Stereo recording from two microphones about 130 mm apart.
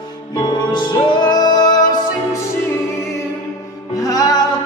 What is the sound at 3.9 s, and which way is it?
Music, 25° left (ahead or behind).